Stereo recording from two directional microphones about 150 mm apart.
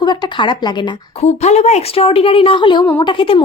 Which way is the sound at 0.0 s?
30° left (ahead or behind).